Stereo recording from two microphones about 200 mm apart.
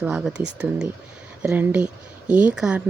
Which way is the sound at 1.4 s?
10° right (ahead or behind).